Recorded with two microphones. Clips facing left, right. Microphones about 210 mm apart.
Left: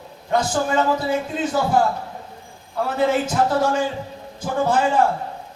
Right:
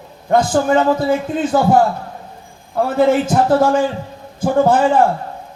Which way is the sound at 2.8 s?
50° right (ahead or behind).